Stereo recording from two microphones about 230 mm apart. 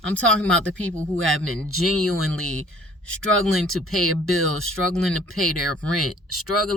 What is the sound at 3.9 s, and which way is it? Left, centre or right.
A woman's voice, right.